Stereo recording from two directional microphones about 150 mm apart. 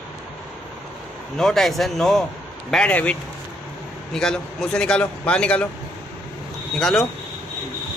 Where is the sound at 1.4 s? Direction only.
Centre (ahead or behind).